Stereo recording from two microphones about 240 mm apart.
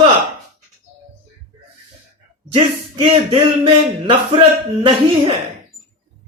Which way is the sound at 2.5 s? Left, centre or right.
Right.